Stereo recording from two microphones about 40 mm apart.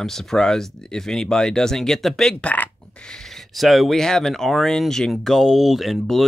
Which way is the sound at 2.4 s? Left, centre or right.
Left.